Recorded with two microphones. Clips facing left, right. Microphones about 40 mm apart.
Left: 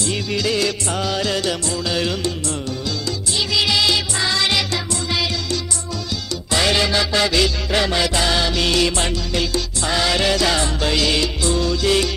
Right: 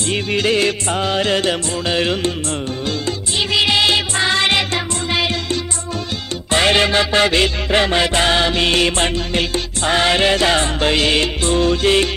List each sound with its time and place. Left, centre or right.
0.0 s music: right